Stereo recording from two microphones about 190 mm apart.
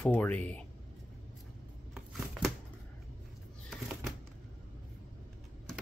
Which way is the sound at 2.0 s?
Centre (ahead or behind).